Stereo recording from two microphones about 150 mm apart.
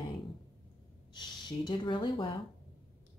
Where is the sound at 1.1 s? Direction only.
30° left (ahead or behind).